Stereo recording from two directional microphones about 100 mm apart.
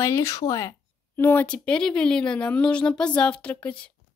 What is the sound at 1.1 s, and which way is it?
Speech, 20° left (ahead or behind).